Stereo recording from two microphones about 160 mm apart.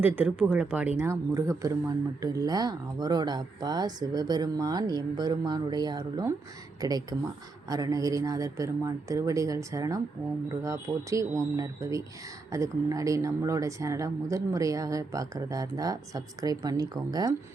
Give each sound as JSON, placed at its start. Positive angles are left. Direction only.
{"t": 0.0, "sound": "speech", "side_deg": -10}